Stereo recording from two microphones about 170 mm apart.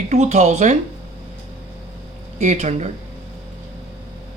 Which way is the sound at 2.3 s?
45° right (ahead or behind).